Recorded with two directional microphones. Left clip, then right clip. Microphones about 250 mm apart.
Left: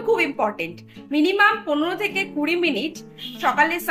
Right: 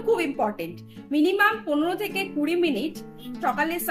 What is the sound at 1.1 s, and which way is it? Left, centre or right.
A woman's voice, centre.